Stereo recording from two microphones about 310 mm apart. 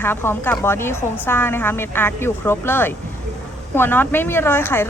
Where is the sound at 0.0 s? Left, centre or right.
Centre.